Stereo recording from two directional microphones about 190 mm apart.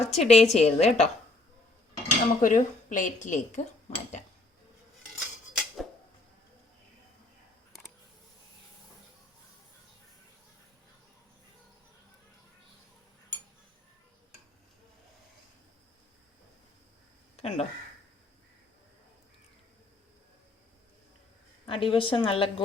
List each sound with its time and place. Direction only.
0.0 s speech: 35° left (ahead or behind)
2.0 s speech: 40° left (ahead or behind)
5.5 s a sound: centre (ahead or behind)
17.3 s speech: 30° left (ahead or behind)
21.7 s a woman's voice: 30° left (ahead or behind)